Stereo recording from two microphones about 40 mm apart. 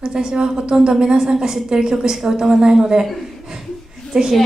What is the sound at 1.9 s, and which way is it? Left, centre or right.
A woman's voice, centre.